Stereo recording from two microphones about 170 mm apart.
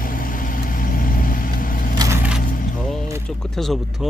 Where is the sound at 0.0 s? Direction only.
55° left (ahead or behind).